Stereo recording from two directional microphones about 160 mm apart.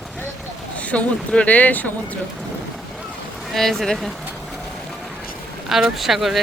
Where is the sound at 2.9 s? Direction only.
Centre (ahead or behind).